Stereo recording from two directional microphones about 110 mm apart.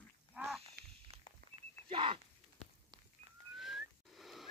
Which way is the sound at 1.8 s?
50° right (ahead or behind).